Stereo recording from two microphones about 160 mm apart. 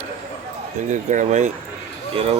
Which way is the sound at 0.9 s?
50° right (ahead or behind).